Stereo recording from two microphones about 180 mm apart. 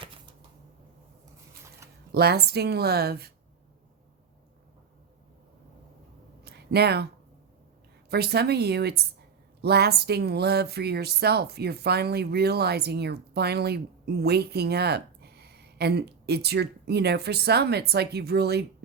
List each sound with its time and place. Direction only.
2.1 s speech: 60° right (ahead or behind)
6.4 s a sound: 65° right (ahead or behind)
8.1 s speech: 65° right (ahead or behind)